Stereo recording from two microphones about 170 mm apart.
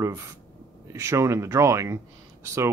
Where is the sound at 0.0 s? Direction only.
15° right (ahead or behind).